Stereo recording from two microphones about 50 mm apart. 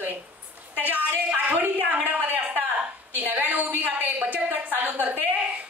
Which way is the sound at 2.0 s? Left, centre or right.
Right.